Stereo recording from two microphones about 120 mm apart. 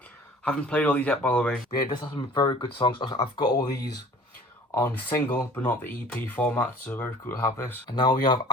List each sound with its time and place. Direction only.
0.4 s speech: 10° left (ahead or behind)
1.7 s speech: 35° left (ahead or behind)
4.7 s speech: 20° left (ahead or behind)
7.9 s speech: 35° left (ahead or behind)